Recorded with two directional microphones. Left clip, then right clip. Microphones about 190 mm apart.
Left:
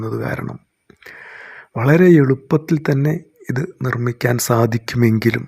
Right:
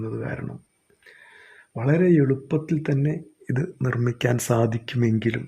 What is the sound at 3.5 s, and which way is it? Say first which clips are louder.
Speech: left 5 dB; 10° left (ahead or behind).